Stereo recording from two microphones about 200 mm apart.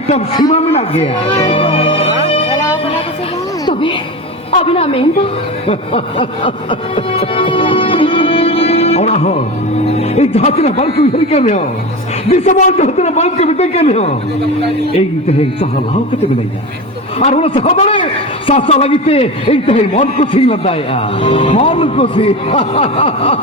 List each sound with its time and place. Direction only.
0.3 s a man's voice: 25° left (ahead or behind)
2.2 s music: 30° left (ahead or behind)
3.7 s a sound: 25° left (ahead or behind)
4.5 s a woman's voice: 30° left (ahead or behind)
17.2 s a man's voice: 30° left (ahead or behind)